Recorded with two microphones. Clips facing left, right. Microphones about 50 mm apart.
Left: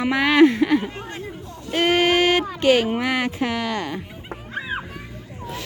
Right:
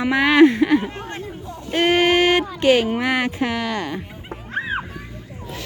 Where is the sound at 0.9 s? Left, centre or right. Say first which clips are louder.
Right 2 dB; right.